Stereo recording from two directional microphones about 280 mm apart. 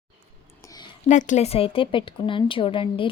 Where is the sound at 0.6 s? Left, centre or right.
Centre.